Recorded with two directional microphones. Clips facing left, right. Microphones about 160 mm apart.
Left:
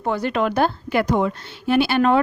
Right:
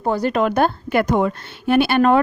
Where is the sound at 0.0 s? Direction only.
40° right (ahead or behind).